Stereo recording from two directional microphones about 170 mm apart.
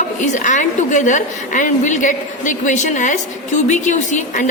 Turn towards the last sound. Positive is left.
turn(degrees=45)  # may be behind; listen again after turning